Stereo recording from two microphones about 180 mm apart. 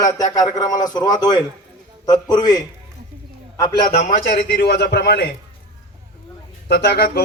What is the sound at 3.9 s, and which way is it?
A man's voice, 50° left (ahead or behind).